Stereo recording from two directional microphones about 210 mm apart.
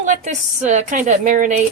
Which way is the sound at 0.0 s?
35° right (ahead or behind).